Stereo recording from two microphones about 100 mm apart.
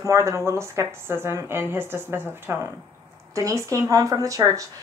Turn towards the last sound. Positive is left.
turn(degrees=-35)  # may be behind; listen again after turning